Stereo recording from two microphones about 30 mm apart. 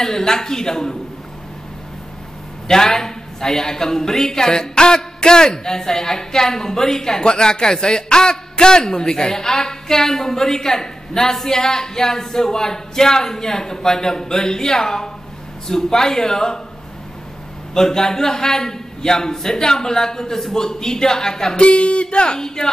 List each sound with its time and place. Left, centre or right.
0.0 s a woman's voice: centre
2.7 s a woman's voice: centre
17.7 s a woman's voice: centre
20.6 s speech: centre
21.5 s speech: left